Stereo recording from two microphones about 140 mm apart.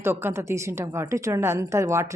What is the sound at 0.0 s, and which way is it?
A woman's voice, 15° right (ahead or behind).